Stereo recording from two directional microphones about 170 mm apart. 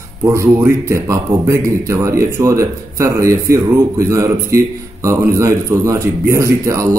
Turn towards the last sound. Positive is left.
turn(degrees=-15)  # may be behind; listen again after turning